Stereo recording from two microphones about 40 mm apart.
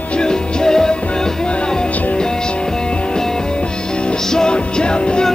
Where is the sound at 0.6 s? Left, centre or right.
Centre.